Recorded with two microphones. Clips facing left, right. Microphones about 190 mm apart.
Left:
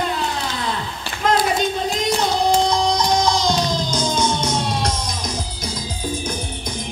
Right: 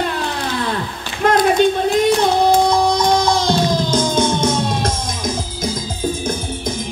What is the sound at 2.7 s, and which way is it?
Music, 55° right (ahead or behind).